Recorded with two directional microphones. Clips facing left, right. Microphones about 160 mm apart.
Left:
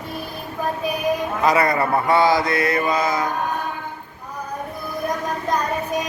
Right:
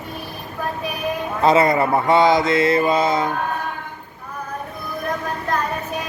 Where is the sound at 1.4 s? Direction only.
25° right (ahead or behind).